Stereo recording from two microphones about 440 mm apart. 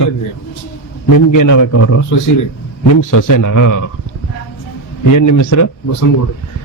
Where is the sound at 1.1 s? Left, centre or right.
Left.